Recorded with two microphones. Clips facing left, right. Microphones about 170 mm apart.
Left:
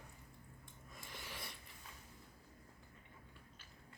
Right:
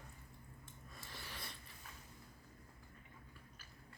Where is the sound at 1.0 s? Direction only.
15° left (ahead or behind).